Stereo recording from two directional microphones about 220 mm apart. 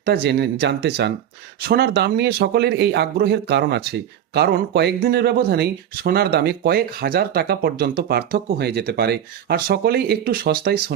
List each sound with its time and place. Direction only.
0.0 s speech: 45° right (ahead or behind)